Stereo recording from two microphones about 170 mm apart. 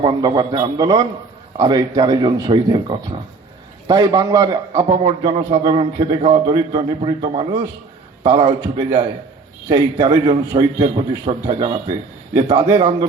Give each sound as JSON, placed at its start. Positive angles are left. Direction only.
{"t": 0.0, "sound": "a man's voice", "side_deg": -25}
{"t": 3.8, "sound": "a man's voice", "side_deg": -20}